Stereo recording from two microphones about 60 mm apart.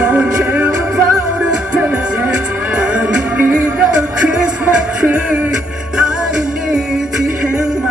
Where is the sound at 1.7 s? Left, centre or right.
Right.